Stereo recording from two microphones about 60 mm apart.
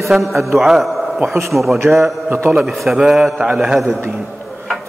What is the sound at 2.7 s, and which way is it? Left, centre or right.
A man's voice, centre.